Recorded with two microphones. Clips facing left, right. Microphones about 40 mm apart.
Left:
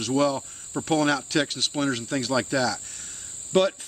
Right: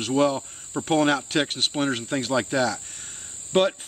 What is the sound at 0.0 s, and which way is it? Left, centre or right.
Speech, right.